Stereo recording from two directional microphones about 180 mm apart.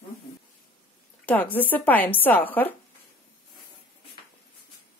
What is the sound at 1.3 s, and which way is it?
Speech, 10° left (ahead or behind).